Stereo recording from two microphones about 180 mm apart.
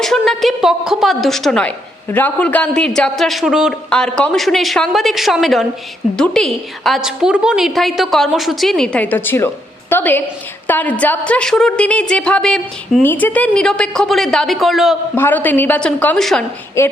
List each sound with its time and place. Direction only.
0.0 s a woman's voice: centre (ahead or behind)
15.1 s a woman's voice: 10° left (ahead or behind)
16.8 s a woman's voice: 15° left (ahead or behind)